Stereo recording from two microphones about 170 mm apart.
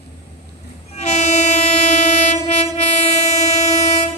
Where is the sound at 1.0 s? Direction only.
40° left (ahead or behind).